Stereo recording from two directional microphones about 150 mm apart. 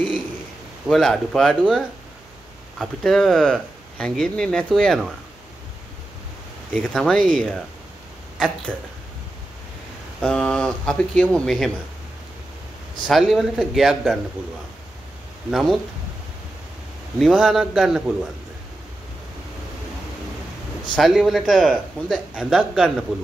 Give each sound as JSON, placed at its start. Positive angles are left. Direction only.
{"t": 0.8, "sound": "a man's voice", "side_deg": 0}
{"t": 6.7, "sound": "a man's voice", "side_deg": 0}
{"t": 7.2, "sound": "speech", "side_deg": -65}
{"t": 10.2, "sound": "a man's voice", "side_deg": 5}
{"t": 13.0, "sound": "a man's voice", "side_deg": 0}
{"t": 15.5, "sound": "a man's voice", "side_deg": 0}
{"t": 17.2, "sound": "a man's voice", "side_deg": 0}
{"t": 20.9, "sound": "a man's voice", "side_deg": 0}